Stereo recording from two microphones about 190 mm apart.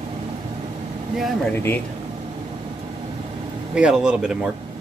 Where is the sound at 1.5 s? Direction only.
10° left (ahead or behind).